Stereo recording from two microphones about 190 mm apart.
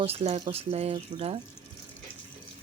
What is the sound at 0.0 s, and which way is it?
Speech, 30° right (ahead or behind).